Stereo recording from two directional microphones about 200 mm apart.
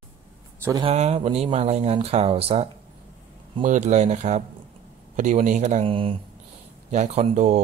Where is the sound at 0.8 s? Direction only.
30° right (ahead or behind).